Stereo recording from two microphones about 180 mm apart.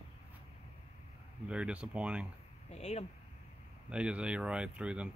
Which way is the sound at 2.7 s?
35° left (ahead or behind).